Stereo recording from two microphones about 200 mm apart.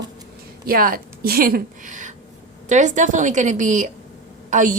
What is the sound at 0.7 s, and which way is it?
A woman's voice, 45° right (ahead or behind).